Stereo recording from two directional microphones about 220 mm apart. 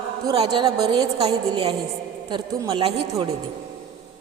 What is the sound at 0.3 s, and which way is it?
A woman's voice, 25° right (ahead or behind).